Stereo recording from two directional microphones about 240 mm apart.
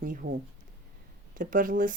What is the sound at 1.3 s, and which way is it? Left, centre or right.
Speech, right.